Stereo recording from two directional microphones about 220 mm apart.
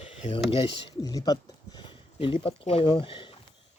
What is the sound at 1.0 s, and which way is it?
Speech, 15° left (ahead or behind).